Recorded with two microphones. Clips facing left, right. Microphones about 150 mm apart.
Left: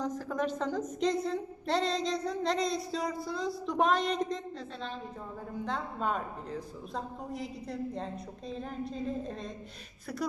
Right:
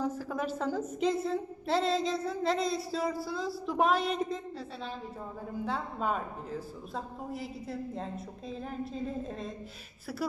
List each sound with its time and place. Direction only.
0.0 s a woman's voice: 10° right (ahead or behind)
5.6 s a woman's voice: 5° right (ahead or behind)